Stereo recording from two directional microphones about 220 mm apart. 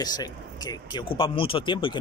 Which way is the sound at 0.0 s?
20° left (ahead or behind).